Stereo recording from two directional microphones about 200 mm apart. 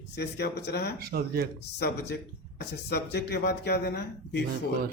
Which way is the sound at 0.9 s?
50° right (ahead or behind).